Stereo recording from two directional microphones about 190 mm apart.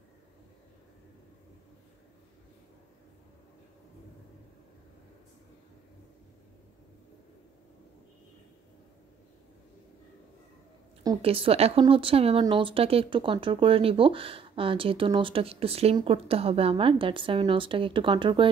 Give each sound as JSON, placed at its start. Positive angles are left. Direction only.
{"t": 11.2, "sound": "a woman's voice", "side_deg": -30}